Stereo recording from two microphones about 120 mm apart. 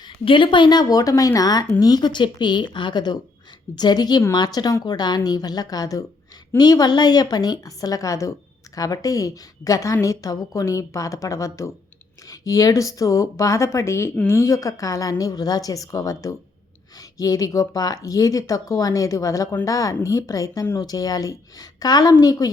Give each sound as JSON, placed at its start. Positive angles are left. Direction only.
{"t": 0.0, "sound": "a woman's voice", "side_deg": 45}